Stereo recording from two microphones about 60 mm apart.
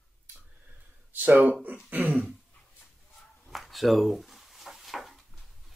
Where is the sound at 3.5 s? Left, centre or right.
Centre.